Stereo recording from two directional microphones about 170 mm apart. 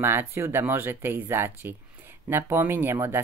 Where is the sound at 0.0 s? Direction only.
15° right (ahead or behind).